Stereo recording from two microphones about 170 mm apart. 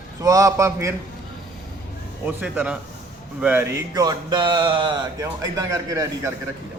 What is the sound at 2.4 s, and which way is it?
A man's voice, 5° right (ahead or behind).